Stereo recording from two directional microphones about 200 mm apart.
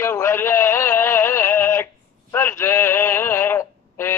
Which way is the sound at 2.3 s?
10° left (ahead or behind).